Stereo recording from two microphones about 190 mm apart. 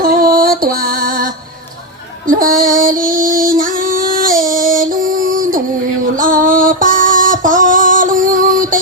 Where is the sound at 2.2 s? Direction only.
45° right (ahead or behind).